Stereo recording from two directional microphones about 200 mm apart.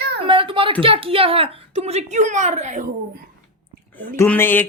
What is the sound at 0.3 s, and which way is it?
A woman's voice, 25° right (ahead or behind).